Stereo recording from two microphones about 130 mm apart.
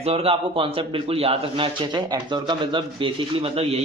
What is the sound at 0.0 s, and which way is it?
A man's voice, 50° right (ahead or behind).